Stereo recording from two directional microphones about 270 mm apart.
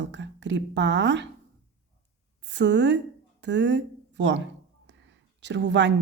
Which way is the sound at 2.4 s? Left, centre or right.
Right.